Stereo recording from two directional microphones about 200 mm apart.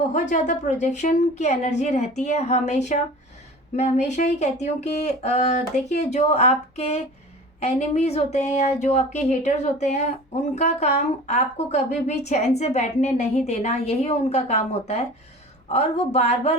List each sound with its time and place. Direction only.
0.1 s a woman's voice: 40° left (ahead or behind)